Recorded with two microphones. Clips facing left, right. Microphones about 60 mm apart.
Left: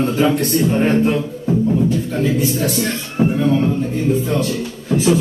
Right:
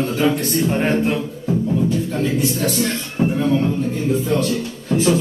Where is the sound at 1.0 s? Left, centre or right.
Centre.